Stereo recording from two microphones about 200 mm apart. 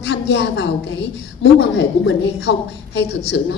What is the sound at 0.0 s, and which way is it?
A woman's voice, 60° left (ahead or behind).